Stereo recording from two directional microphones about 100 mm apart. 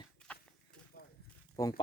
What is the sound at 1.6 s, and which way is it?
Speech, 35° left (ahead or behind).